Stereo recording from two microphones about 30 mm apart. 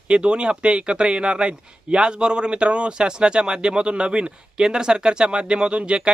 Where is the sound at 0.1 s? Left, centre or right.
Right.